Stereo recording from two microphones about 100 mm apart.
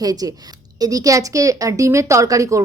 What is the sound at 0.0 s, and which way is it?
A woman's voice, 40° right (ahead or behind).